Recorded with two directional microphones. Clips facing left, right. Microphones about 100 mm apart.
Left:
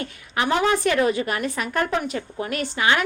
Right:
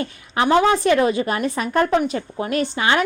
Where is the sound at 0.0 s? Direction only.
30° right (ahead or behind).